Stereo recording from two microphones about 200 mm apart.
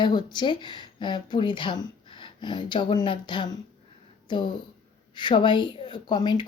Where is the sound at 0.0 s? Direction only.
20° left (ahead or behind).